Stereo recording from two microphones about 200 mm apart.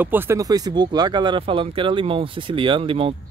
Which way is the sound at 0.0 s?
10° right (ahead or behind).